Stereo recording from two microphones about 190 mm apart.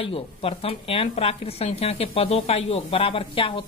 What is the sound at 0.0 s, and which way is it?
Speech, 30° left (ahead or behind).